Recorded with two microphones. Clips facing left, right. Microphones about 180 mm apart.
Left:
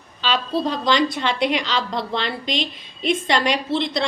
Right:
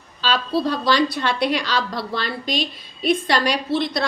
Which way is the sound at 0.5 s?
20° left (ahead or behind).